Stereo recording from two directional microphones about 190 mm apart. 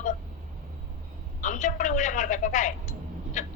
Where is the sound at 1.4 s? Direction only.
40° left (ahead or behind).